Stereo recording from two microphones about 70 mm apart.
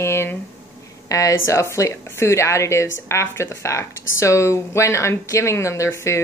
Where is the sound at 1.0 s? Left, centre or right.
Left.